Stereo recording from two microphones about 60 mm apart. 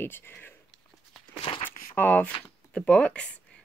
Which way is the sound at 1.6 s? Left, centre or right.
Left.